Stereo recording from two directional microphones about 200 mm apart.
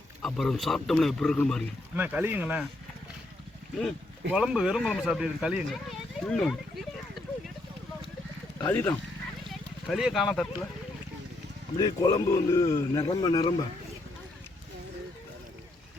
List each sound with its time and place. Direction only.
0.2 s speech: centre (ahead or behind)
2.0 s speech: 10° right (ahead or behind)
4.3 s speech: 5° right (ahead or behind)
8.7 s speech: 10° left (ahead or behind)
9.5 s speech: centre (ahead or behind)
11.8 s speech: 20° left (ahead or behind)